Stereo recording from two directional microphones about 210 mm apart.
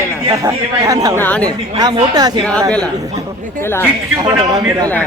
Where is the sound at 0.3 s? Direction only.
15° right (ahead or behind).